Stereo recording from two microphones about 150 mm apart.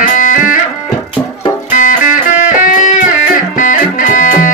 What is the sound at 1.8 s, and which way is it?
Music, 60° left (ahead or behind).